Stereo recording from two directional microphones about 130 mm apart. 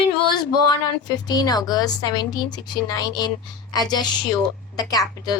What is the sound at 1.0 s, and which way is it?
A woman's voice, 30° left (ahead or behind).